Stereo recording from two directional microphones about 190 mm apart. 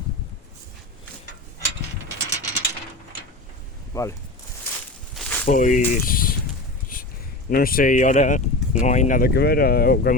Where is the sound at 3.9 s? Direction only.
15° left (ahead or behind).